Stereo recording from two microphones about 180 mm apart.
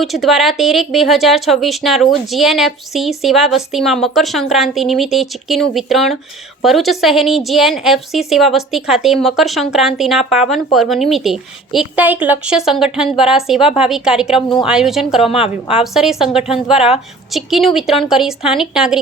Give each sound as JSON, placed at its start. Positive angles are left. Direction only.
{"t": 0.0, "sound": "a woman's voice", "side_deg": 0}
{"t": 15.3, "sound": "a woman's voice", "side_deg": 30}
{"t": 15.7, "sound": "a woman's voice", "side_deg": 0}